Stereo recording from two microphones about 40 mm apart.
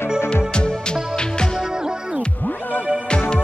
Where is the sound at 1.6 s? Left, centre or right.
Centre.